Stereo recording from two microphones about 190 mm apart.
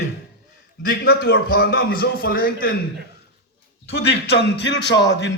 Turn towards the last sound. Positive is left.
turn(degrees=20)  # may be behind; listen again after turning